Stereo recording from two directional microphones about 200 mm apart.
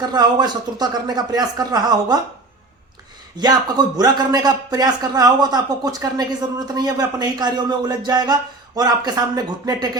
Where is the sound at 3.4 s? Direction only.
20° right (ahead or behind).